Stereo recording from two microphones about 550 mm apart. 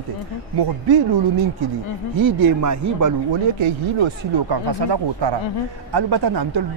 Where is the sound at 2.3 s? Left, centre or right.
Right.